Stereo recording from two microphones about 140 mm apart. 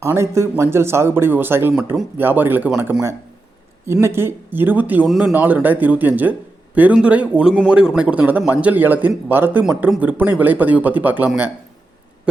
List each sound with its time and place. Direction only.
0.0 s a man's voice: 20° right (ahead or behind)
4.0 s a man's voice: 15° right (ahead or behind)